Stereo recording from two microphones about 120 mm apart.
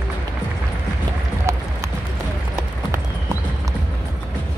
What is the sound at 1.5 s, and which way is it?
Run, 25° right (ahead or behind).